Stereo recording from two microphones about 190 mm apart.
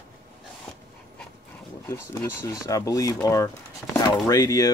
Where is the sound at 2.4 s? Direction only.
15° left (ahead or behind).